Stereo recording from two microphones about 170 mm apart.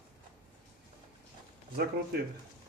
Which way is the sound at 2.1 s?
65° right (ahead or behind).